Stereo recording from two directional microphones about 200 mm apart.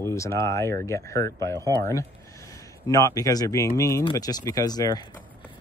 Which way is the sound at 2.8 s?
15° left (ahead or behind).